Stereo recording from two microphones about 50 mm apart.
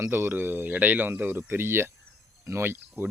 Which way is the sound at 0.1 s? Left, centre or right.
Right.